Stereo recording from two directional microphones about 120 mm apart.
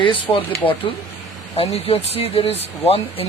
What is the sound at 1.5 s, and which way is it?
Speech, 55° left (ahead or behind).